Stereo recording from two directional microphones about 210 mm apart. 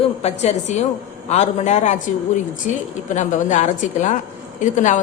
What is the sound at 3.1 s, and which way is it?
A woman's voice, 35° left (ahead or behind).